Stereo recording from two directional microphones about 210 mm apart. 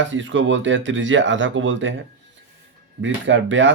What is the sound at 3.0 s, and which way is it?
Speech, 60° right (ahead or behind).